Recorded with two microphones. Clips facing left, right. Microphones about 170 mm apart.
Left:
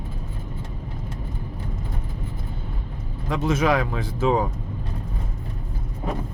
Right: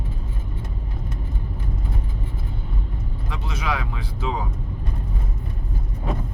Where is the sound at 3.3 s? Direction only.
45° left (ahead or behind).